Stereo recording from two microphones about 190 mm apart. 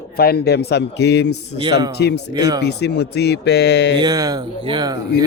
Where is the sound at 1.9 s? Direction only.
60° left (ahead or behind).